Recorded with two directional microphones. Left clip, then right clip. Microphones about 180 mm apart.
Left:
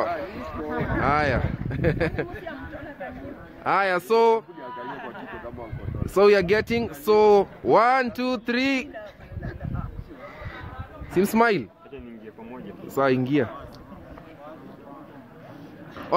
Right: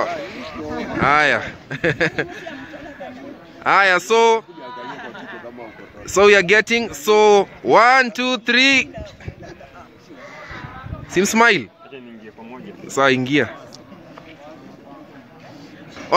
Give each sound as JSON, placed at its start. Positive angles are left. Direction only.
{"t": 0.0, "sound": "a sound", "side_deg": 0}
{"t": 0.7, "sound": "speech", "side_deg": -10}
{"t": 3.6, "sound": "speech", "side_deg": -5}
{"t": 4.6, "sound": "a sound", "side_deg": -65}
{"t": 6.1, "sound": "speech", "side_deg": -5}
{"t": 11.1, "sound": "speech", "side_deg": -5}
{"t": 12.8, "sound": "speech", "side_deg": -5}